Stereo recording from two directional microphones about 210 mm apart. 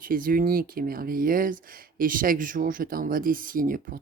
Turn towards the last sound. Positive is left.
turn(degrees=-40)  # may be behind; listen again after turning